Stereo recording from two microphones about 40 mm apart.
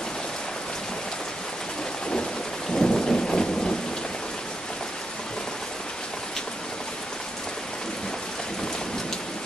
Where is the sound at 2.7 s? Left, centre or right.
Left.